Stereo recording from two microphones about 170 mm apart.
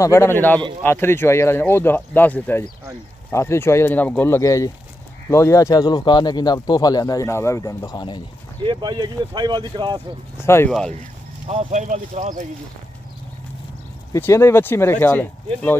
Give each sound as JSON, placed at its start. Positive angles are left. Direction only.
{"t": 0.0, "sound": "speech", "side_deg": 15}
{"t": 8.6, "sound": "speech", "side_deg": -25}
{"t": 10.3, "sound": "speech", "side_deg": 15}
{"t": 10.7, "sound": "speech", "side_deg": 5}
{"t": 11.4, "sound": "speech", "side_deg": -40}
{"t": 14.1, "sound": "speech", "side_deg": 15}